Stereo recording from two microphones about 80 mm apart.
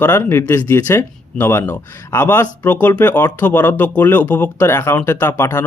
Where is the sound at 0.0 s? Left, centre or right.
Left.